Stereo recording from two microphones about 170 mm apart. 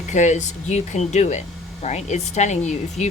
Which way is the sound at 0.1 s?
45° left (ahead or behind).